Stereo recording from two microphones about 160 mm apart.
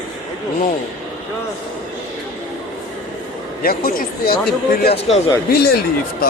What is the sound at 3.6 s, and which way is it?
Speech, 65° left (ahead or behind).